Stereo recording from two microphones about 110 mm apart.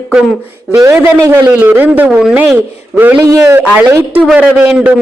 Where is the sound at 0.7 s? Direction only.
25° right (ahead or behind); by 2.6 s 5° right (ahead or behind).